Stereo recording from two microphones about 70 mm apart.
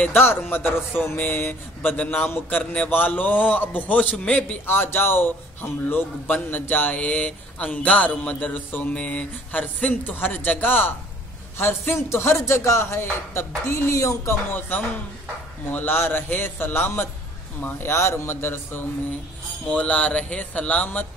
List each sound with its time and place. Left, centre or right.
0.0 s speech: left
4.6 s a man's voice: left
15.7 s a man's voice: left
19.7 s speech: centre